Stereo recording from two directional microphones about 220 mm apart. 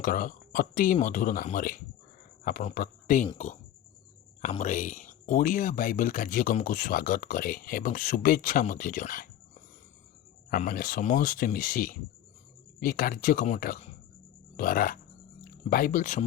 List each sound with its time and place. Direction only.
0.0 s a man's voice: 40° left (ahead or behind)
10.5 s speech: 40° left (ahead or behind)